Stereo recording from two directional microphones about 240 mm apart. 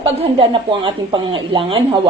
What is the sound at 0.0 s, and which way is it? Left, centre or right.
Speech, right.